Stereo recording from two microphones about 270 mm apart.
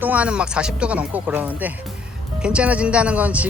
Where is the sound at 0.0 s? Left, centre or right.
Centre.